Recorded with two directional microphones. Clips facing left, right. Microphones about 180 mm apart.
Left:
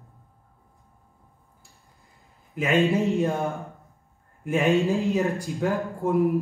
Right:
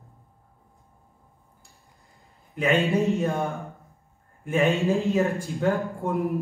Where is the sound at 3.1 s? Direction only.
15° left (ahead or behind).